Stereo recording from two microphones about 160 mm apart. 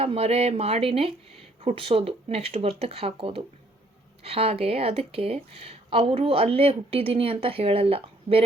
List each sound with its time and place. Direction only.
0.0 s speech: 35° right (ahead or behind)